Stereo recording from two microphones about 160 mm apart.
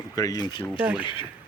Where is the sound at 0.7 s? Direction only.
5° right (ahead or behind).